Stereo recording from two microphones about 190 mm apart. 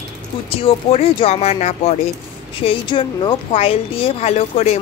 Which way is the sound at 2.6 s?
25° left (ahead or behind).